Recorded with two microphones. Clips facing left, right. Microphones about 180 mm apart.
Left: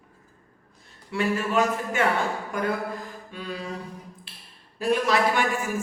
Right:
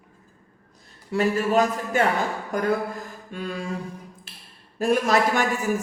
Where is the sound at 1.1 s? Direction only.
40° right (ahead or behind).